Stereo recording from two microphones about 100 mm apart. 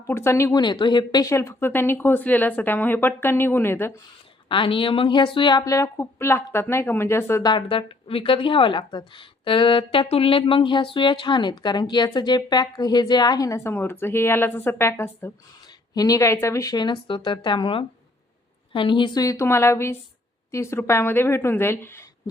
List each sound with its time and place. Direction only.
0.1 s speech: 25° left (ahead or behind)
0.5 s a woman's voice: 50° left (ahead or behind)
1.2 s speech: 30° left (ahead or behind)
4.4 s speech: 60° left (ahead or behind)
5.6 s speech: 30° left (ahead or behind)
7.4 s a woman's voice: 55° left (ahead or behind); by 13.6 s 40° left (ahead or behind)
13.7 s speech: 20° left (ahead or behind)
16.0 s speech: 35° left (ahead or behind)
16.7 s a woman's voice: 50° left (ahead or behind)
19.2 s speech: 30° left (ahead or behind)